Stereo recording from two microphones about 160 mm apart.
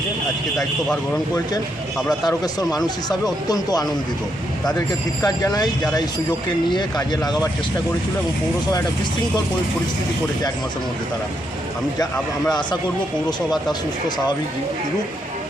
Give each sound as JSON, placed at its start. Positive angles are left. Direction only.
{"t": 2.2, "sound": "speech", "side_deg": 25}
{"t": 5.2, "sound": "speech", "side_deg": 25}
{"t": 6.7, "sound": "speech", "side_deg": 25}